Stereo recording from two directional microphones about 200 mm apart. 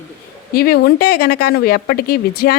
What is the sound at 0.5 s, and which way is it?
Speech, 50° left (ahead or behind).